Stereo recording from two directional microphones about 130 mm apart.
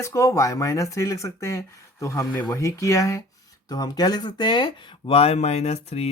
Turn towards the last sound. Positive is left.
turn(degrees=55)  # may be behind; listen again after turning